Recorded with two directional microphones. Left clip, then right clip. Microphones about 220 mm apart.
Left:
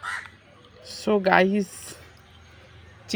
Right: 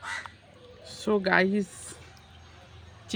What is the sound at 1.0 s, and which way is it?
Speech, 20° left (ahead or behind).